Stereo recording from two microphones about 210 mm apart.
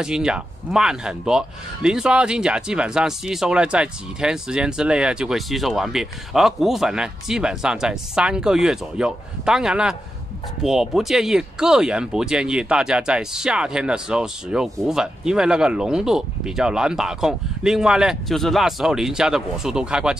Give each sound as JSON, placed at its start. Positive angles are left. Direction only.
{"t": 0.0, "sound": "speech", "side_deg": -5}